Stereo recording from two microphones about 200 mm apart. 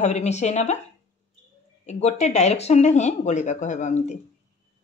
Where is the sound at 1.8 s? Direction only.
35° left (ahead or behind).